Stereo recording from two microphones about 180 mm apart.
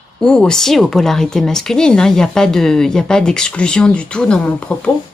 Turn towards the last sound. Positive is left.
turn(degrees=5)  # may be behind; listen again after turning